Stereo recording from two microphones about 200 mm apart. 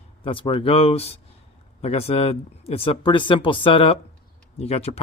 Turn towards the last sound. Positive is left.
turn(degrees=30)  # may be behind; listen again after turning